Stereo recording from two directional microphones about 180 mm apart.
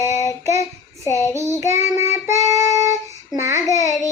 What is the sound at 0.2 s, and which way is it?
Child singing, 15° right (ahead or behind).